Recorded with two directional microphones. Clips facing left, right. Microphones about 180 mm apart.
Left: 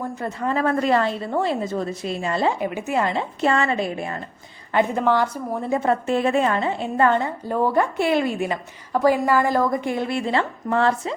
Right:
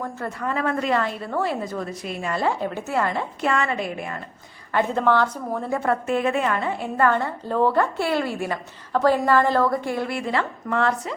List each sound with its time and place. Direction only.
0.0 s a woman's voice: 15° left (ahead or behind)
0.4 s a woman's voice: 35° left (ahead or behind)
1.3 s a woman's voice: 25° left (ahead or behind)
4.7 s a woman's voice: 15° left (ahead or behind); by 11.1 s 30° left (ahead or behind)